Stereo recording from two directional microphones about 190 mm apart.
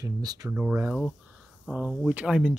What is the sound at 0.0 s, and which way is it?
Speech, 20° right (ahead or behind).